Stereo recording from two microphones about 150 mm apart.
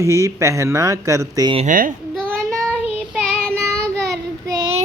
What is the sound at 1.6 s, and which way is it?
Speech, 65° right (ahead or behind).